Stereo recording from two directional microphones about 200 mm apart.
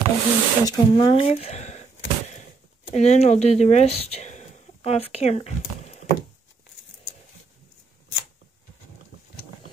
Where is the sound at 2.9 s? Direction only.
35° left (ahead or behind).